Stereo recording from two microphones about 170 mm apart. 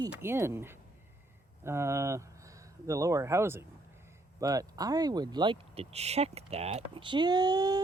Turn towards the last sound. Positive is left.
turn(degrees=-20)  # may be behind; listen again after turning